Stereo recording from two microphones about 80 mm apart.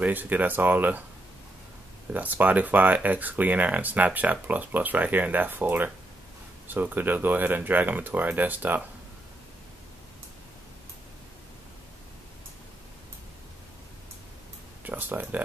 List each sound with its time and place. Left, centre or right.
0.0 s speech: right
2.1 s speech: right
14.9 s speech: right